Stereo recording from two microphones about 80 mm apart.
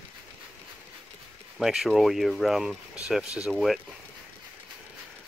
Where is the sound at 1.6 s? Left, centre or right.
Centre.